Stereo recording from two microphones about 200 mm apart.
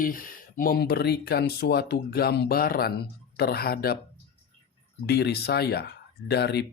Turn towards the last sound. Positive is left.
turn(degrees=55)  # may be behind; listen again after turning